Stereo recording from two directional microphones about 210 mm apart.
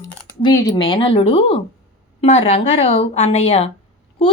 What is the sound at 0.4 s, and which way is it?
Speech, 20° left (ahead or behind).